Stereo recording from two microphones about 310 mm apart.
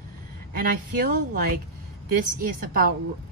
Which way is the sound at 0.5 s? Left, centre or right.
Right.